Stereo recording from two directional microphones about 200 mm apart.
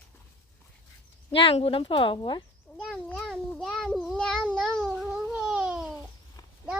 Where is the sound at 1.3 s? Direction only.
25° left (ahead or behind).